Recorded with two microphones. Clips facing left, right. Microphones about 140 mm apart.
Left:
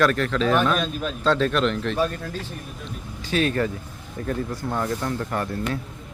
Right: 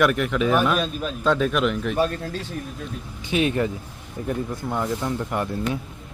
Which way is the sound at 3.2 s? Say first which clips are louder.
Right 1 dB; 15° right (ahead or behind).